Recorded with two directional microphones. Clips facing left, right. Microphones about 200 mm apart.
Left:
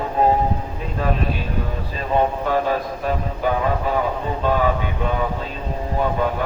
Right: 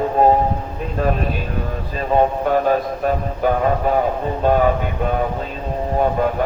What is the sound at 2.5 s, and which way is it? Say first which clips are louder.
A man's voice: right 4 dB; 50° right (ahead or behind).